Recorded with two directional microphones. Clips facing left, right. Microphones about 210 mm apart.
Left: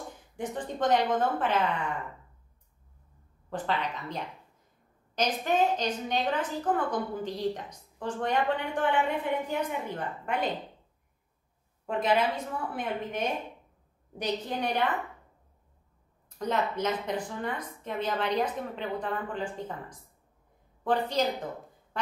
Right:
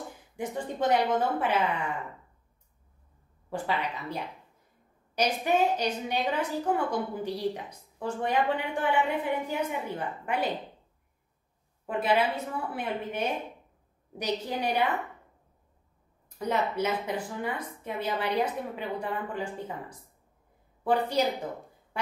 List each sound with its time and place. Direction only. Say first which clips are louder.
0.4 s a woman's voice: even; 10° right (ahead or behind)
3.4 s a woman's voice: even; 10° right (ahead or behind)
11.8 s a woman's voice: even; 5° right (ahead or behind)
16.3 s a woman's voice: right 1 dB; 10° right (ahead or behind)
21.1 s a woman's voice: right 1 dB; 10° right (ahead or behind)
21.9 s a sound: right 1 dB; 10° right (ahead or behind)